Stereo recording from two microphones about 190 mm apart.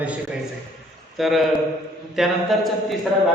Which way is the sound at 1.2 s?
Centre (ahead or behind).